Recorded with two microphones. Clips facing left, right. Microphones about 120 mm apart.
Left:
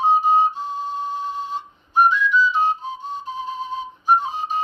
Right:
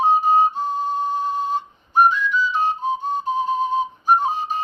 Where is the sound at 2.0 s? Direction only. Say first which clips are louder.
Left 1 dB; 45° right (ahead or behind).